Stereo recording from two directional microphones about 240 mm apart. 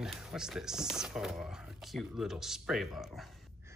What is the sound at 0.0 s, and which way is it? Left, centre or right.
Speech, centre.